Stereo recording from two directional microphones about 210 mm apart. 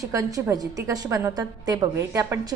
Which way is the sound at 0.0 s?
15° right (ahead or behind).